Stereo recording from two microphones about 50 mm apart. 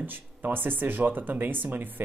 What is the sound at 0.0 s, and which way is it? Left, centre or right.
Speech, right.